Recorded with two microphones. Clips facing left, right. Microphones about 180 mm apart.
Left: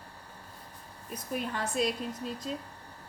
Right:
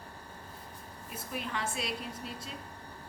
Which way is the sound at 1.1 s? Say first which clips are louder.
Left 4 dB; 40° left (ahead or behind).